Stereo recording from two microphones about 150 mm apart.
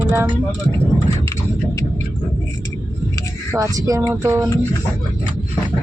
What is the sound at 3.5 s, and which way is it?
Speech, 25° right (ahead or behind).